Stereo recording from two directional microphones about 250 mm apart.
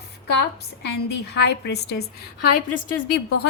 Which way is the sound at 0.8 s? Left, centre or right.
Left.